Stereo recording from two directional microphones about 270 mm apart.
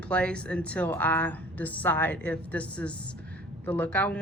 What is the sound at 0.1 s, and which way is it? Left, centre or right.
Speech, centre.